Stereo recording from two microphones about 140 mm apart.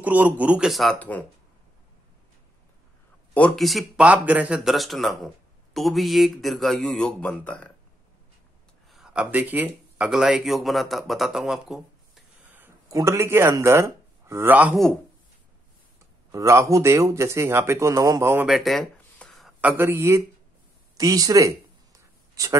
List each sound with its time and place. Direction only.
0.0 s speech: 10° right (ahead or behind)
0.9 s speech: 10° left (ahead or behind)
3.3 s speech: 5° left (ahead or behind)
8.9 s speech: 5° right (ahead or behind)
12.5 s a sound: 15° right (ahead or behind)
12.9 s speech: 20° right (ahead or behind)
16.3 s speech: 20° right (ahead or behind)
18.5 s a sound: centre (ahead or behind)
19.6 s speech: 15° right (ahead or behind)
21.0 s a sound: 25° right (ahead or behind)